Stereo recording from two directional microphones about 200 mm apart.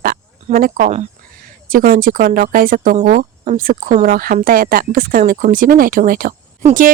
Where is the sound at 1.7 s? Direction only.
45° right (ahead or behind).